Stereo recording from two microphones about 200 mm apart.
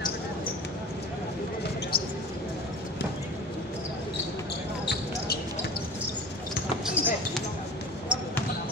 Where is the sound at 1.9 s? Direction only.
50° left (ahead or behind).